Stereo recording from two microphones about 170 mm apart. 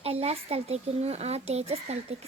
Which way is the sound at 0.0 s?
35° right (ahead or behind).